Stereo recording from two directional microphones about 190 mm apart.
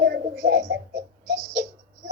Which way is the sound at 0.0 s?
65° right (ahead or behind).